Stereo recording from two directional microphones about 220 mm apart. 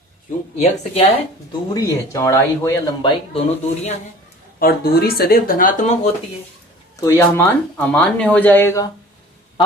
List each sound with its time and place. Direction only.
0.5 s speech: 30° left (ahead or behind)
1.7 s speech: 15° left (ahead or behind)
3.3 s speech: 25° left (ahead or behind)
4.6 s speech: 45° left (ahead or behind)
7.0 s speech: 15° left (ahead or behind)